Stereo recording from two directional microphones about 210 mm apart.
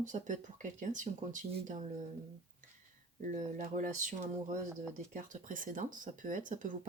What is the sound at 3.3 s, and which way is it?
Speech, 35° right (ahead or behind).